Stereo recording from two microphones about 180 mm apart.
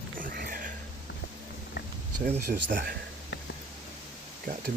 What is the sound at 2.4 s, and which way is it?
Speech, 70° right (ahead or behind).